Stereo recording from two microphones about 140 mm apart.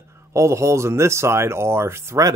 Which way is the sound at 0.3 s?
20° right (ahead or behind).